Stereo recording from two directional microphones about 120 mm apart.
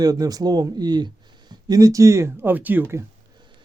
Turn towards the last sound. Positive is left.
turn(degrees=-20)  # may be behind; listen again after turning